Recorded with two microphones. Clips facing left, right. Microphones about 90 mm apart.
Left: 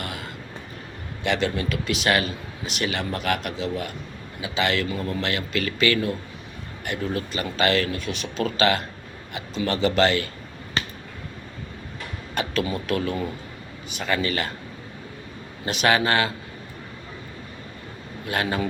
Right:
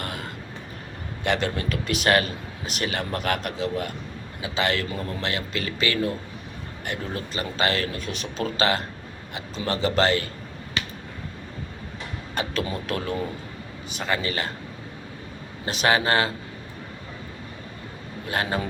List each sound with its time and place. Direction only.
1.2 s a man's voice: 40° right (ahead or behind)
10.8 s finger snapping: 35° left (ahead or behind)
12.3 s a man's voice: 35° right (ahead or behind)
15.6 s a man's voice: 30° right (ahead or behind)
18.3 s a man's voice: 30° right (ahead or behind)